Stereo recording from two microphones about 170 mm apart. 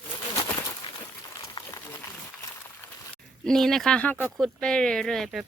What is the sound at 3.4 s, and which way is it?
Speech, centre (ahead or behind).